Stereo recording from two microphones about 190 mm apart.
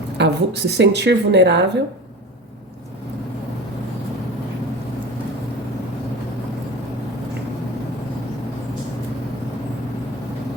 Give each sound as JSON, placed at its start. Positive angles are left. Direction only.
{"t": 0.2, "sound": "speech", "side_deg": -65}